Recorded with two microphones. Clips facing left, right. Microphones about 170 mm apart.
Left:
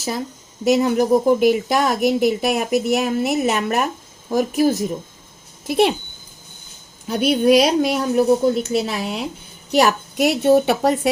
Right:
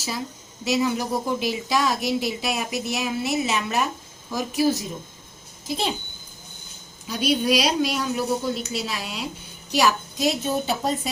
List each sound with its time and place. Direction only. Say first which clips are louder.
0.6 s a woman's voice: left 7 dB; 50° left (ahead or behind)
5.6 s a woman's voice: left 10 dB; 60° left (ahead or behind)
7.1 s a woman's voice: left 7 dB; 55° left (ahead or behind)